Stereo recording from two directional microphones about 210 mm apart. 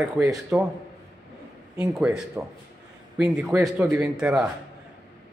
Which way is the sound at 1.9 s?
Centre (ahead or behind).